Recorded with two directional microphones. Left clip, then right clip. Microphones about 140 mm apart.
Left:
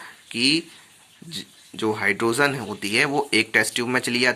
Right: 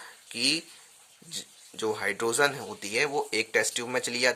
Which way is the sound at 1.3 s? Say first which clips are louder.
Left 5 dB; 45° right (ahead or behind).